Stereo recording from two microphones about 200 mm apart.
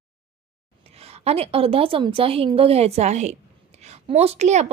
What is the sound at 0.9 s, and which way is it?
A woman's voice, 30° right (ahead or behind).